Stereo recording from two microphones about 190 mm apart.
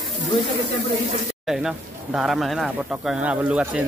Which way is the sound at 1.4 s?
Centre (ahead or behind).